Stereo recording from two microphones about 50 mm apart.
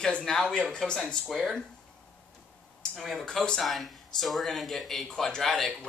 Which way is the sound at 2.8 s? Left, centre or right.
Centre.